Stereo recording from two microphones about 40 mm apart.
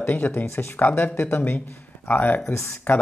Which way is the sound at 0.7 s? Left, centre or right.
Left.